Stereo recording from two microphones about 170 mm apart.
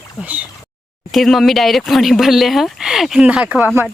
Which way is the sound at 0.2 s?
10° right (ahead or behind).